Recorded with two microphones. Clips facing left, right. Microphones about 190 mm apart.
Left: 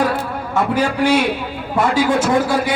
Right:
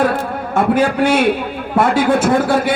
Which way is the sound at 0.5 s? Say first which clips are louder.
Right 4 dB; 55° right (ahead or behind).